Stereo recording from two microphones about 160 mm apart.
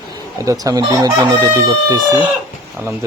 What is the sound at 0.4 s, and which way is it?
Chicken, 20° right (ahead or behind).